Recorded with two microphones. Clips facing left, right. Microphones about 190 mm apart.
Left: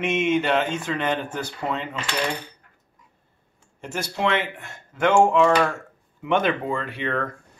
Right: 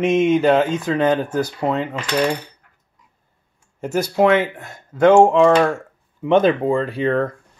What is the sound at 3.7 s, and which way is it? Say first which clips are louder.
Speech: right 11 dB; 40° right (ahead or behind).